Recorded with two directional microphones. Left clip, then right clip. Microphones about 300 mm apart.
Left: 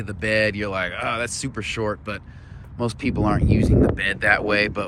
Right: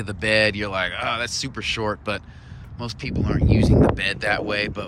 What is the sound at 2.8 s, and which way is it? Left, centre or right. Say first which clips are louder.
Speech: left 5 dB; centre.